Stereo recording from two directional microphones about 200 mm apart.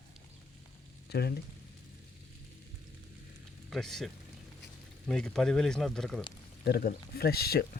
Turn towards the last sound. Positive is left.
turn(degrees=50)  # may be behind; listen again after turning